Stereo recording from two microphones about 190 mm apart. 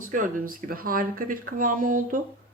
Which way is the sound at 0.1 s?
45° right (ahead or behind).